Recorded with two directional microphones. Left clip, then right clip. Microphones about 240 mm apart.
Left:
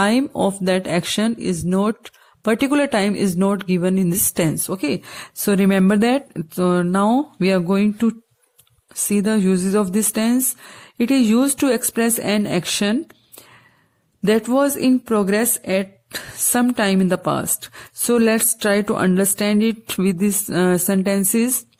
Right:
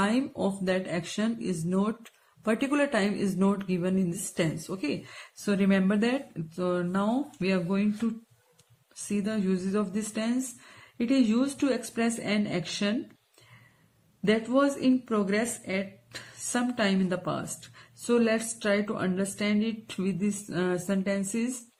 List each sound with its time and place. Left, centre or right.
0.0 s a woman's voice: left
14.3 s a woman's voice: left